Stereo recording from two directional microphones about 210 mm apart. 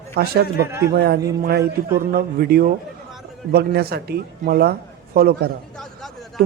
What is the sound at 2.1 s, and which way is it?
A man's voice, 45° right (ahead or behind).